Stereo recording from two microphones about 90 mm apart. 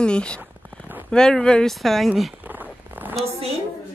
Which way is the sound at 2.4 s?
20° right (ahead or behind).